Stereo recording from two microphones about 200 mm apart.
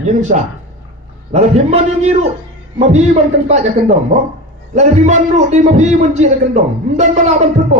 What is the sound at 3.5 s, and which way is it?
A man's voice, 35° right (ahead or behind).